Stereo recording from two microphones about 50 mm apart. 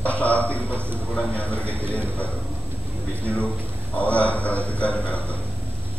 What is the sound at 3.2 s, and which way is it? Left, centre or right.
A man's voice, left.